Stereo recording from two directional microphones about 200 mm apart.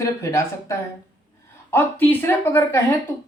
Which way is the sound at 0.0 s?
15° left (ahead or behind).